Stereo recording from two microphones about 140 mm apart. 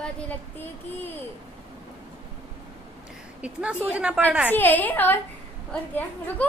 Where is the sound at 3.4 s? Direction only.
10° right (ahead or behind).